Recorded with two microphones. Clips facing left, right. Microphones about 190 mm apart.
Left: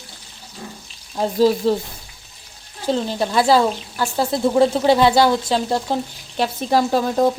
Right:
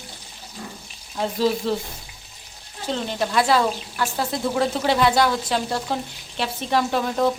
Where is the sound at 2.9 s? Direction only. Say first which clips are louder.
Left 4 dB; 40° left (ahead or behind).